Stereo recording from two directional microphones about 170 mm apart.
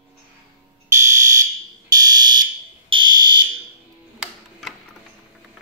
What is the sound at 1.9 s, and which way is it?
Fire alarm, 25° right (ahead or behind).